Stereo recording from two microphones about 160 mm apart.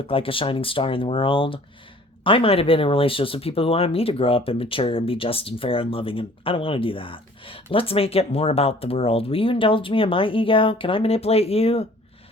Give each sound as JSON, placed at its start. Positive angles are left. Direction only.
{"t": 0.1, "sound": "speech", "side_deg": 35}